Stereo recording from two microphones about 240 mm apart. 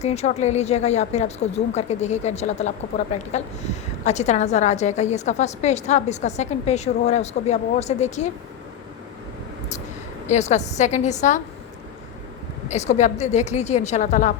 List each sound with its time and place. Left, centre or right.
0.0 s a woman's voice: left
10.2 s a woman's voice: left
12.6 s a woman's voice: left